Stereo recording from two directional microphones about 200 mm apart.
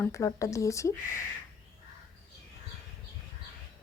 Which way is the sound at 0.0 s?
15° left (ahead or behind).